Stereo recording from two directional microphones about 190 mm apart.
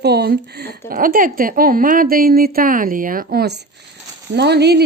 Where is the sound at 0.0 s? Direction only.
55° right (ahead or behind).